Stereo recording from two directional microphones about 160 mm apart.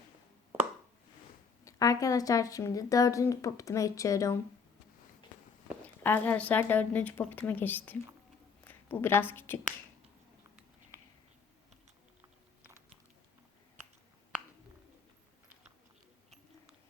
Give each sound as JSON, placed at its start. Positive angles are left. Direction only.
{"t": 1.6, "sound": "speech", "side_deg": 20}
{"t": 5.8, "sound": "a woman's voice", "side_deg": 10}